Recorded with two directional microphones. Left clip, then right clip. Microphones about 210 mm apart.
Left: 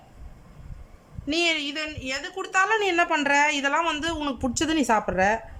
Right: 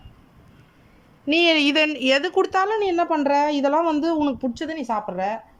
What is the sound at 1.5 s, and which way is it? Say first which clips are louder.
A woman's voice: right 11 dB; 30° right (ahead or behind).